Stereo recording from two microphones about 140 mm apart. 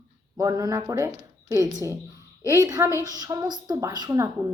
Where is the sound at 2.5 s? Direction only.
25° right (ahead or behind).